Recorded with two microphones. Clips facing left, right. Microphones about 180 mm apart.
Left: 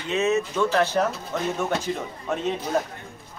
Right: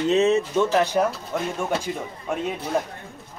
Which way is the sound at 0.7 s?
15° right (ahead or behind).